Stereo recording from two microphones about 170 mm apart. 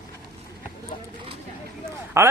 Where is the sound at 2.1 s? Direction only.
15° right (ahead or behind).